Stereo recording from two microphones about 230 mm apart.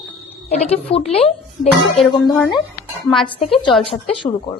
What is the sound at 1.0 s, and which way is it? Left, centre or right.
Speech, left.